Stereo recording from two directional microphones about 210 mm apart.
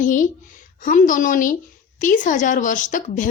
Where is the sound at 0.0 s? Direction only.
40° left (ahead or behind).